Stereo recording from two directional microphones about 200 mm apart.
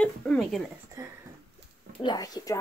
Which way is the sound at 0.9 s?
15° right (ahead or behind).